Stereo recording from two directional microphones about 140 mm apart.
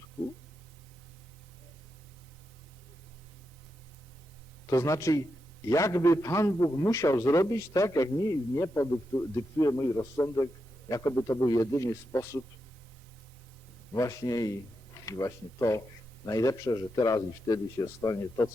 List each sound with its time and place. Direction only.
4.7 s a man's voice: 20° left (ahead or behind)
13.9 s a man's voice: 25° left (ahead or behind)